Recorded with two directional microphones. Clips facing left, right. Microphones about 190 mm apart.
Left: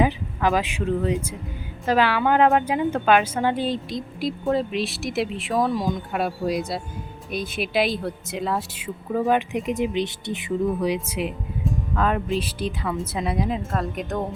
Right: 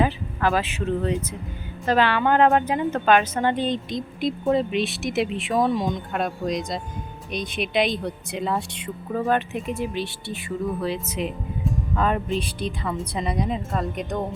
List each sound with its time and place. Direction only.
0.0 s a woman's voice: 15° left (ahead or behind)
11.6 s a woman's voice: centre (ahead or behind)